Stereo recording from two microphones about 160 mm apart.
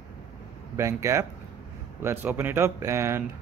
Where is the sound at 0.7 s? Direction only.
15° right (ahead or behind).